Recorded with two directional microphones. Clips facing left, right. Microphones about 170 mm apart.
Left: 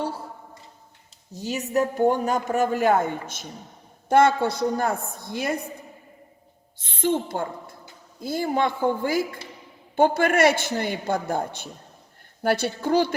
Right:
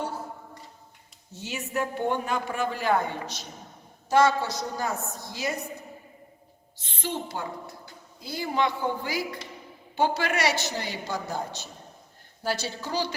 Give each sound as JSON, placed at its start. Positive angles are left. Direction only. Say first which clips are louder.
{"t": 1.3, "sound": "a man's voice", "louder": "left 7 dB", "side_deg": 40}
{"t": 6.7, "sound": "a man's voice", "louder": "left 9 dB", "side_deg": 50}